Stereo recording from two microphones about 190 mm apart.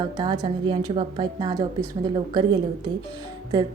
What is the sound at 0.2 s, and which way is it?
A woman's voice, 25° right (ahead or behind).